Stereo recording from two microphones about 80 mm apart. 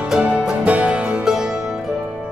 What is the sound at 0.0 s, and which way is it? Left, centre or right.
Music, centre.